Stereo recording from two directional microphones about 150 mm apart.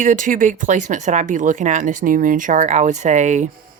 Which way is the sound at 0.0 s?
60° right (ahead or behind).